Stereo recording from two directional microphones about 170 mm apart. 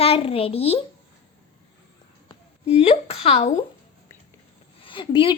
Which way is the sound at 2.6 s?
35° left (ahead or behind).